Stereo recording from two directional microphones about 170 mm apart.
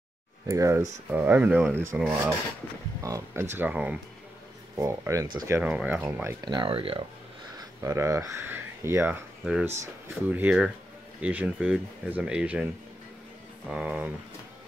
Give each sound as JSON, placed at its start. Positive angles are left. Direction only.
{"t": 0.5, "sound": "speech", "side_deg": -20}
{"t": 3.0, "sound": "speech", "side_deg": -15}
{"t": 5.6, "sound": "speech", "side_deg": -5}
{"t": 7.5, "sound": "speech", "side_deg": -20}
{"t": 13.7, "sound": "speech", "side_deg": -10}